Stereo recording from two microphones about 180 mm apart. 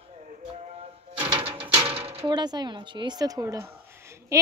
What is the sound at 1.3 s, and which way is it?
Coin, 30° right (ahead or behind).